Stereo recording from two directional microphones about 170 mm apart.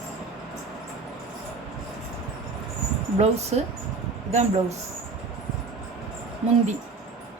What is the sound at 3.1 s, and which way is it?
Speech, 40° right (ahead or behind).